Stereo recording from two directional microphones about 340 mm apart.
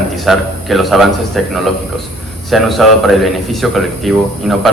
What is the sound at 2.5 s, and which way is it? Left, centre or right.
A man's voice, centre.